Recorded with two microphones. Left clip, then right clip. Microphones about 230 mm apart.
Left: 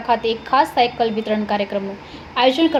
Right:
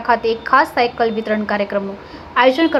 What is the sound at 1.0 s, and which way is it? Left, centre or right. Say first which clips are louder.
Speech: right 2 dB; centre.